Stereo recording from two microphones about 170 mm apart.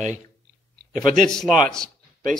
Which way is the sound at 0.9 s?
50° right (ahead or behind).